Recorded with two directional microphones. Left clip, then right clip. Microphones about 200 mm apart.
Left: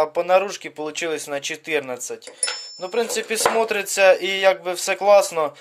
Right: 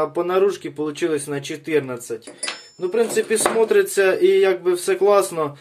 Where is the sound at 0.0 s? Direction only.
35° left (ahead or behind).